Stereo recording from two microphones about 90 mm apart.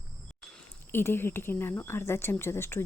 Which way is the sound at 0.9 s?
25° left (ahead or behind).